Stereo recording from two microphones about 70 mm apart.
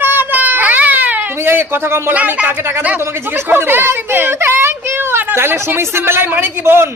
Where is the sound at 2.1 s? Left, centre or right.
Right.